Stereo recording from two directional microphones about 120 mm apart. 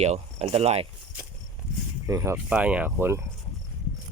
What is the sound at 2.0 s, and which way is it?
Speech, 25° right (ahead or behind).